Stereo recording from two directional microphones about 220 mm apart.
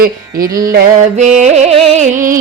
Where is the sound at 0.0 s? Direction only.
40° right (ahead or behind).